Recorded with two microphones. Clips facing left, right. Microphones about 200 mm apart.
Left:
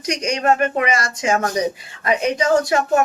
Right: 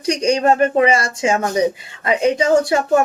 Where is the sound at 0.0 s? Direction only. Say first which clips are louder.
Right 5 dB; 30° right (ahead or behind).